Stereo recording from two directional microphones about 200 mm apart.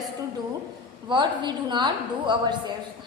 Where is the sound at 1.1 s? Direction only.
20° right (ahead or behind).